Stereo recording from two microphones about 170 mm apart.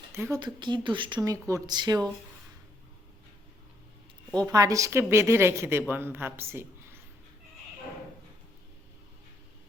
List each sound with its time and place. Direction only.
0.3 s speech: 25° right (ahead or behind)
4.4 s a woman's voice: 20° right (ahead or behind)